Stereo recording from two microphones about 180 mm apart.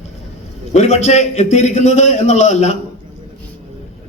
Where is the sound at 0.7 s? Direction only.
40° left (ahead or behind).